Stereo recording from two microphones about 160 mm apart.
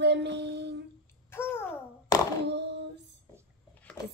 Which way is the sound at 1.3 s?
15° left (ahead or behind).